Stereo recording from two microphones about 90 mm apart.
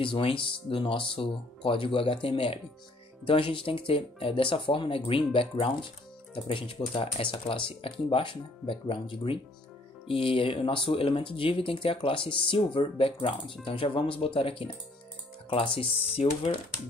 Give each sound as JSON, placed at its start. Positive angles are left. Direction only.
{"t": 0.0, "sound": "speech", "side_deg": 75}
{"t": 10.0, "sound": "speech", "side_deg": 90}
{"t": 13.7, "sound": "speech", "side_deg": 80}